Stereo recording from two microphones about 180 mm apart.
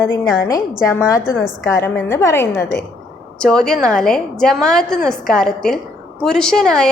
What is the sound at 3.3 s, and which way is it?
A woman's voice, 5° left (ahead or behind).